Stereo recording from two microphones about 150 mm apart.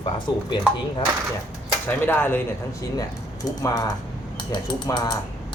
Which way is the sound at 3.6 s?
25° left (ahead or behind).